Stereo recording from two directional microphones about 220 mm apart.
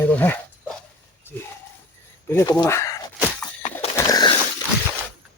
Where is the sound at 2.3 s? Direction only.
15° left (ahead or behind).